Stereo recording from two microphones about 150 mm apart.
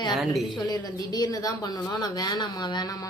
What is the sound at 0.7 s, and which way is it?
A woman's voice, 25° left (ahead or behind).